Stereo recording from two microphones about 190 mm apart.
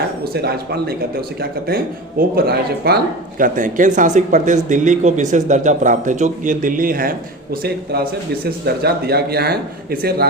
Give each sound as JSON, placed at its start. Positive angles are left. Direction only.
{"t": 0.3, "sound": "speech", "side_deg": -55}